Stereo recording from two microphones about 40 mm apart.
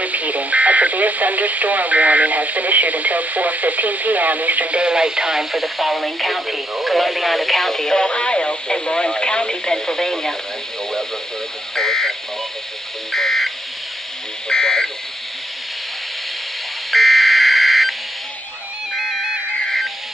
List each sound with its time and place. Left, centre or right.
0.0 s speech: right
4.7 s speech: right; by 10.3 s centre
11.7 s a sound: centre
13.1 s buzzer: centre
14.5 s buzzer: centre
16.9 s buzzer: centre